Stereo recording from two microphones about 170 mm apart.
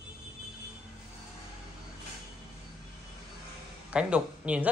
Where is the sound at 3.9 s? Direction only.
5° right (ahead or behind).